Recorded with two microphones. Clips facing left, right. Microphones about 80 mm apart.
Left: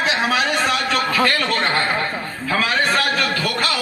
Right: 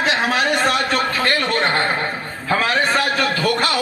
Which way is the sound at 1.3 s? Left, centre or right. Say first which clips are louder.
Right 1 dB; centre.